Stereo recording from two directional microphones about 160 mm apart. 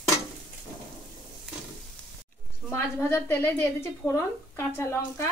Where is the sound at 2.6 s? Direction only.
15° left (ahead or behind).